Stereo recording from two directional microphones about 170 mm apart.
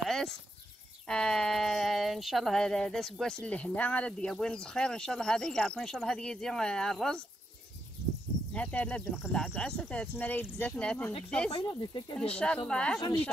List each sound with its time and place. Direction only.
0.0 s a sound: centre (ahead or behind)
1.0 s speech: 5° left (ahead or behind)
8.5 s speech: 5° left (ahead or behind)
9.1 s speech: 5° right (ahead or behind)
11.7 s speech: 30° left (ahead or behind)
12.2 s speech: 5° left (ahead or behind)